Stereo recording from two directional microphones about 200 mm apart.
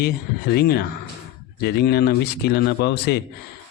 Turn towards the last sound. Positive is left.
turn(degrees=55)  # may be behind; listen again after turning